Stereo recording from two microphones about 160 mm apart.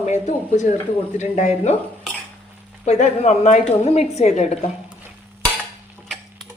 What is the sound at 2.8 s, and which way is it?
A woman's voice, 45° left (ahead or behind).